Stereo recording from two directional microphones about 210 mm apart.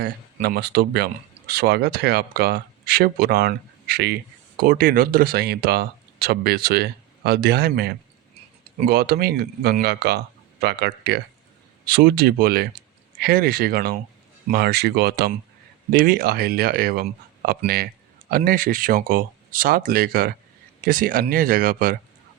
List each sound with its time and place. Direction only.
0.0 s speech: 45° right (ahead or behind)